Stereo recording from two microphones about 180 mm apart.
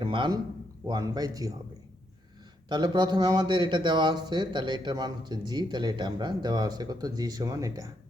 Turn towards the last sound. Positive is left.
turn(degrees=-20)  # may be behind; listen again after turning